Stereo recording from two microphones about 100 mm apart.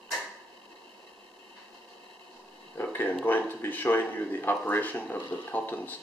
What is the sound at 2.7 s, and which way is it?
Speech, 20° left (ahead or behind).